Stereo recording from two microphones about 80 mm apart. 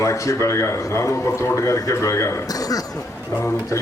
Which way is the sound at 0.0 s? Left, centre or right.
Left.